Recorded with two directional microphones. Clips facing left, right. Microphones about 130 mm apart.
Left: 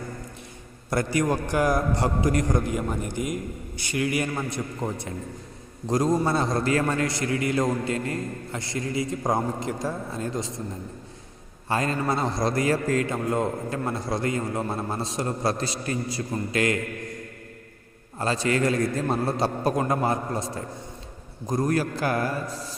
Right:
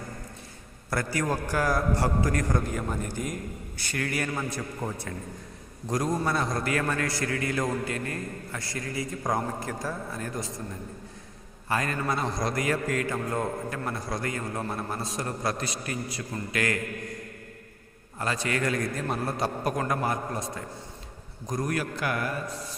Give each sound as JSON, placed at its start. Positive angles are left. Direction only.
{"t": 0.9, "sound": "a man's voice", "side_deg": 20}
{"t": 11.7, "sound": "a man's voice", "side_deg": 25}
{"t": 18.2, "sound": "a man's voice", "side_deg": 30}